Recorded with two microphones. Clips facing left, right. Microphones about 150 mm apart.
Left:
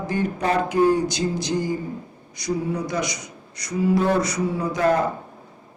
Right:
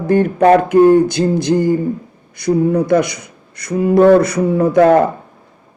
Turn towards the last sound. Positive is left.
turn(degrees=-60)  # may be behind; listen again after turning